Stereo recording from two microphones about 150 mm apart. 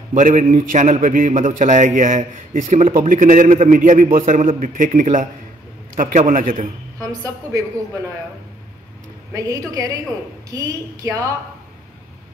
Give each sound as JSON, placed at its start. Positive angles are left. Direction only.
{"t": 0.1, "sound": "a man's voice", "side_deg": -55}
{"t": 7.0, "sound": "a woman's voice", "side_deg": -25}
{"t": 9.3, "sound": "a woman's voice", "side_deg": -25}